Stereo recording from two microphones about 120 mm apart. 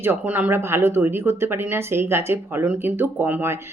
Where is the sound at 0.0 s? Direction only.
15° right (ahead or behind).